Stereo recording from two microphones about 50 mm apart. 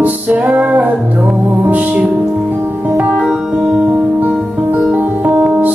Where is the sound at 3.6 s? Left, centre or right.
Right.